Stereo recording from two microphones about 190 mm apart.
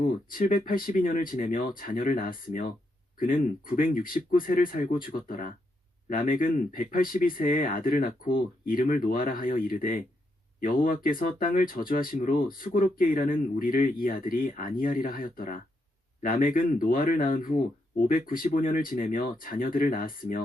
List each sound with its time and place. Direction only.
0.0 s speech: 45° left (ahead or behind)